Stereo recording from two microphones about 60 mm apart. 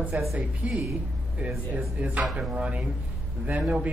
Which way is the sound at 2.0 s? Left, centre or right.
Right.